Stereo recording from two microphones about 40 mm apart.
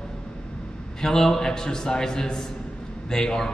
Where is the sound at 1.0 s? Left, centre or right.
Centre.